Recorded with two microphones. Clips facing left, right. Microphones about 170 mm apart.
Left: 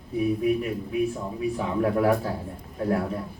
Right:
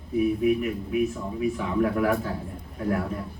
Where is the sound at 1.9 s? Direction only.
30° left (ahead or behind).